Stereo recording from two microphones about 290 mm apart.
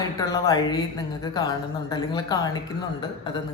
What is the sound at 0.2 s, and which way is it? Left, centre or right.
Speech, centre.